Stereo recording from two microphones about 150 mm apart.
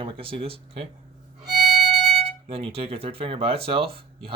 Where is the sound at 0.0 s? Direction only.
35° right (ahead or behind).